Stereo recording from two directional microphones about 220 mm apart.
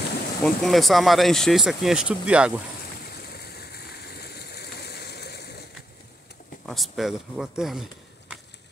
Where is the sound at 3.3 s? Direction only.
45° left (ahead or behind).